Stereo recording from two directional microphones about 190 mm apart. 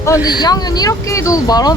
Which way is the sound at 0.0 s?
20° left (ahead or behind).